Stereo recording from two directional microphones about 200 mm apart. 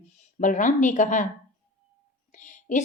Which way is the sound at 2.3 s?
40° left (ahead or behind).